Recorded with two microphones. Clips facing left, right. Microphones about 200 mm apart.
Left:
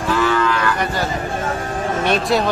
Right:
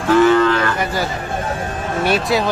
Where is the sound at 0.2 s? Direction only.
50° right (ahead or behind).